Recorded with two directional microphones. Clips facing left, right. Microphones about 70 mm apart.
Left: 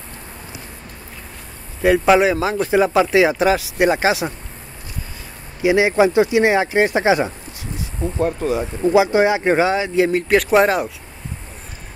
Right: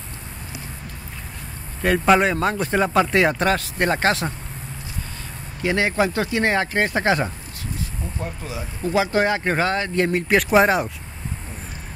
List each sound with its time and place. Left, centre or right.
1.8 s speech: centre
5.6 s speech: centre
8.2 s speech: left
8.8 s speech: centre